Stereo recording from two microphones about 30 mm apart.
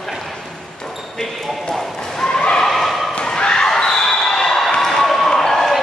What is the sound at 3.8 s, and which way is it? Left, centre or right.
Basketball bounce, left.